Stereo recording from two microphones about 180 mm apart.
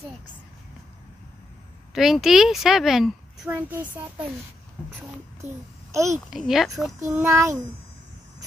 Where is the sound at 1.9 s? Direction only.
Centre (ahead or behind).